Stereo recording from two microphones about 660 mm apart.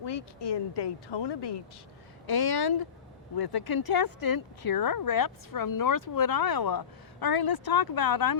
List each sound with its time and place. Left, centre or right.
0.0 s speech: left